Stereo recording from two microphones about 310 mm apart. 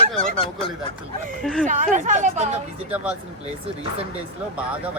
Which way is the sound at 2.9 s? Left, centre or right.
Centre.